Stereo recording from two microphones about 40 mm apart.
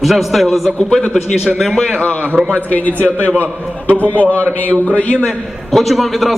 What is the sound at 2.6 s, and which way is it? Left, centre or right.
A man's voice, left.